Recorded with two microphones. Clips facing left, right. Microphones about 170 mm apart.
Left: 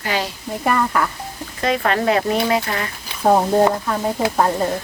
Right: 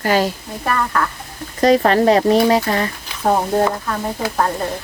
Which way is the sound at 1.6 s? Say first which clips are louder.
Right 7 dB; 35° right (ahead or behind).